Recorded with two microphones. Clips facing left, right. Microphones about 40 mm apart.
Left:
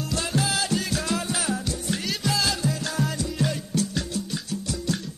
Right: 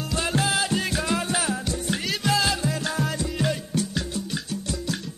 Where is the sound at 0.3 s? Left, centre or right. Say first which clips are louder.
Right 2 dB; right.